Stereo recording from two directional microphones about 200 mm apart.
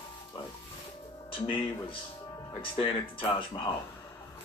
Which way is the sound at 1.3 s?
25° left (ahead or behind).